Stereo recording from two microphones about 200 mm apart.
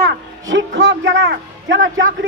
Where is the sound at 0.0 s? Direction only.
65° right (ahead or behind).